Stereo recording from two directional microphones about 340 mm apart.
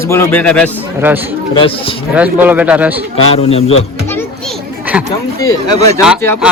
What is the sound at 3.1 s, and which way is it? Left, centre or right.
Speech, centre.